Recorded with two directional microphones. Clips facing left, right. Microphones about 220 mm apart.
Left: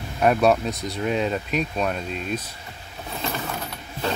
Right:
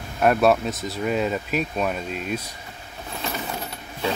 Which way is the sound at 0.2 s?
Centre (ahead or behind).